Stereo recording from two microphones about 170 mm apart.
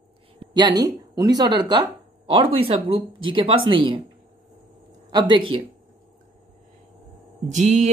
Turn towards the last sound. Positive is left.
turn(degrees=-45)  # may be behind; listen again after turning